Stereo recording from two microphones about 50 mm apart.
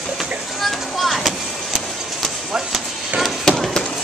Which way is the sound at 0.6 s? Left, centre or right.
Centre.